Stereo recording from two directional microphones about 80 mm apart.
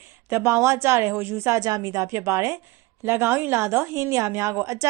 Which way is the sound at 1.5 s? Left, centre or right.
Right.